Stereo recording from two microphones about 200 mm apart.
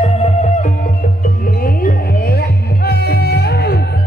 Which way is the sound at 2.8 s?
55° left (ahead or behind).